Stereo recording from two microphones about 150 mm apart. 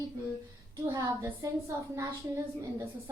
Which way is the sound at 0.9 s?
20° right (ahead or behind).